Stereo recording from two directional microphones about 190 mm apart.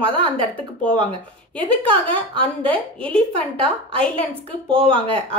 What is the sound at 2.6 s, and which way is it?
Speech, 5° left (ahead or behind).